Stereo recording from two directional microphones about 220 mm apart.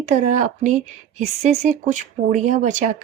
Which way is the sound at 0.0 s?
35° right (ahead or behind).